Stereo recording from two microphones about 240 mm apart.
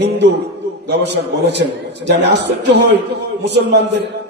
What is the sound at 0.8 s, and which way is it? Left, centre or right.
A man's voice, right.